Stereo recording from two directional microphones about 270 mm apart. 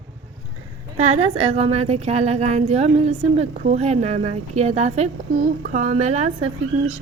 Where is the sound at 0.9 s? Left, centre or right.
Right.